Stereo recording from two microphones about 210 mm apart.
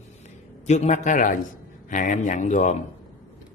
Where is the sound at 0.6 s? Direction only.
35° left (ahead or behind).